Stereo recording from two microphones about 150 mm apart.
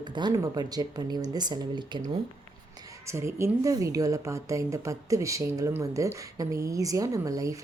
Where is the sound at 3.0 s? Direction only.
20° right (ahead or behind).